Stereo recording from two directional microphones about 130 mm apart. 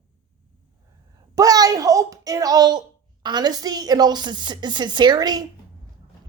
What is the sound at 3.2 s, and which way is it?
A woman's voice, 35° right (ahead or behind).